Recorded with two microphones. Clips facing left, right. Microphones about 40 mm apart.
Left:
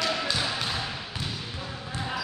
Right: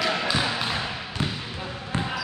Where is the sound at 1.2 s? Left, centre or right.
Right.